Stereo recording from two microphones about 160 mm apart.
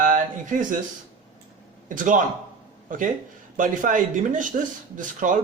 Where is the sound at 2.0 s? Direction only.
55° right (ahead or behind).